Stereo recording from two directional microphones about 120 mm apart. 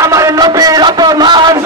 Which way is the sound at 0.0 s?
25° right (ahead or behind).